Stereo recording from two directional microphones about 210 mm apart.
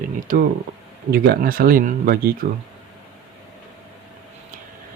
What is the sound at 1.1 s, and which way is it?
Speech, 45° right (ahead or behind).